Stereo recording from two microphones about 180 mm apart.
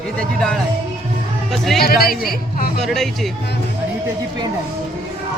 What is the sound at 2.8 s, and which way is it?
Speech, centre (ahead or behind).